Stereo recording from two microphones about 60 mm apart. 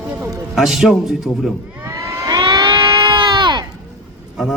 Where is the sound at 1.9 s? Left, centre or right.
Right.